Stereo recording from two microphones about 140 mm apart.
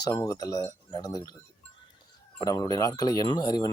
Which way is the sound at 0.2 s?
25° left (ahead or behind).